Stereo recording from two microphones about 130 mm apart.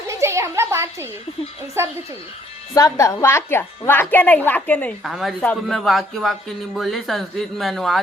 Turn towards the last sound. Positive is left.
turn(degrees=0)  # may be behind; listen again after turning